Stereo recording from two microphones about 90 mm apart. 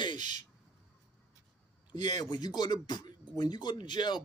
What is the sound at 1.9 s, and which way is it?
Speech, 50° left (ahead or behind).